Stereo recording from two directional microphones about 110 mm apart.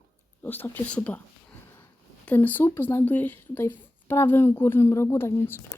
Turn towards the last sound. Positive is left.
turn(degrees=20)  # may be behind; listen again after turning